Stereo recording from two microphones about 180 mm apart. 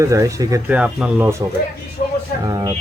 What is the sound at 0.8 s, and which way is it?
Speech, 5° right (ahead or behind).